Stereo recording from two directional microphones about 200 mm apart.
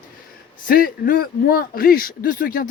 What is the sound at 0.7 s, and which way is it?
Speech, 45° left (ahead or behind).